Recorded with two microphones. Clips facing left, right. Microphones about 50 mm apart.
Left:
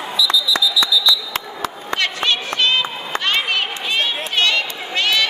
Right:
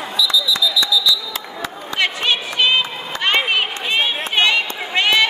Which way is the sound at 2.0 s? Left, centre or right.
Centre.